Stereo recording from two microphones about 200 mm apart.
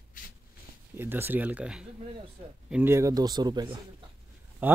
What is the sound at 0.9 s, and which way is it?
Speech, 10° right (ahead or behind).